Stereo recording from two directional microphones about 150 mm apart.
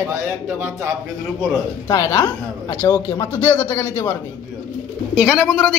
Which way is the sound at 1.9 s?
25° left (ahead or behind).